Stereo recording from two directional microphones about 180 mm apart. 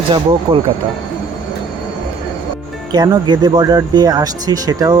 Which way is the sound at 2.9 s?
20° right (ahead or behind).